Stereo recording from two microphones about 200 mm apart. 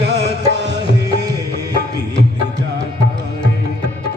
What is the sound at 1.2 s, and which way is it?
Music, 15° right (ahead or behind).